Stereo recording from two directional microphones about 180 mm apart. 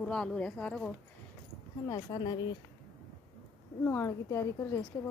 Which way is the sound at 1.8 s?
25° left (ahead or behind).